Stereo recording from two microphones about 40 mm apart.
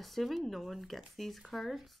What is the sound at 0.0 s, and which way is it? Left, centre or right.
Speech, centre.